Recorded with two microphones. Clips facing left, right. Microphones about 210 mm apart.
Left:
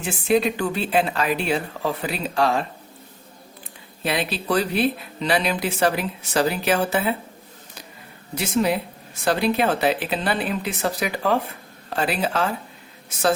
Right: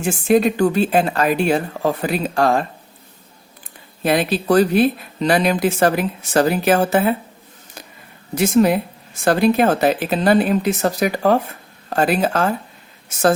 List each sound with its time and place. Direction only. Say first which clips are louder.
0.0 s speech: right 5 dB; 45° right (ahead or behind)
4.0 s speech: right 7 dB; 45° right (ahead or behind)
8.4 s speech: right 7 dB; 50° right (ahead or behind)